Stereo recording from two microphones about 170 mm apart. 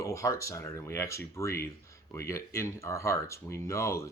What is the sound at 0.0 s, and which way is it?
Speech, 20° left (ahead or behind).